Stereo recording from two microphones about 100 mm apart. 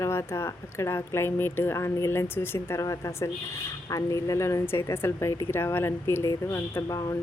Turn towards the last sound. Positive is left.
turn(degrees=35)  # may be behind; listen again after turning